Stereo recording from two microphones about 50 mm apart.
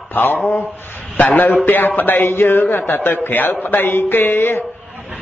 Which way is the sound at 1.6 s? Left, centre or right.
Left.